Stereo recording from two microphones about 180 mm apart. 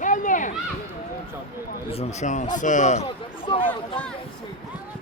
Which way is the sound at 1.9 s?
35° left (ahead or behind).